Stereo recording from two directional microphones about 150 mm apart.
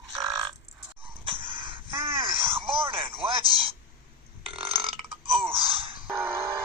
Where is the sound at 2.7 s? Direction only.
35° right (ahead or behind).